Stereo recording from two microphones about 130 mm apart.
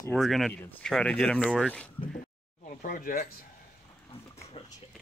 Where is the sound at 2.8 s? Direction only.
90° left.